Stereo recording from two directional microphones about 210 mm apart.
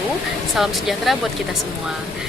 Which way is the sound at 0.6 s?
Centre (ahead or behind).